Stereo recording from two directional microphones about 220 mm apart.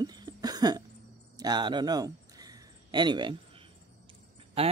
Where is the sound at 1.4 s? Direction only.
20° right (ahead or behind).